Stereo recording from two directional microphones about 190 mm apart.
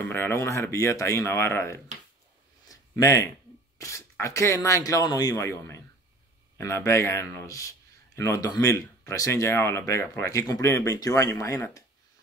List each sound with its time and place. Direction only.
0.0 s speech: 10° left (ahead or behind)
2.7 s a sound: 20° left (ahead or behind)
3.7 s speech: 15° left (ahead or behind)